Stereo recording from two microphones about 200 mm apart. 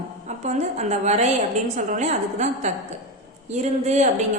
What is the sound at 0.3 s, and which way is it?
A woman's voice, 35° right (ahead or behind).